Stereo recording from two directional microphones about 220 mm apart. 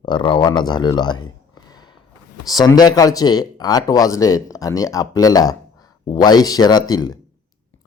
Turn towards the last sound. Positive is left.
turn(degrees=20)  # may be behind; listen again after turning